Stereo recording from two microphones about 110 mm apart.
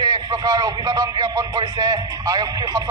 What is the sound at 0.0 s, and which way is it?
Speech, 35° right (ahead or behind).